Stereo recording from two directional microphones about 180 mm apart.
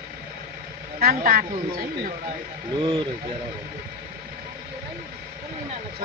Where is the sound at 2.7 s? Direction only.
25° right (ahead or behind).